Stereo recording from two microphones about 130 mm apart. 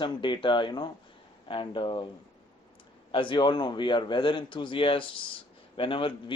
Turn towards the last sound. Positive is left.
turn(degrees=45)  # may be behind; listen again after turning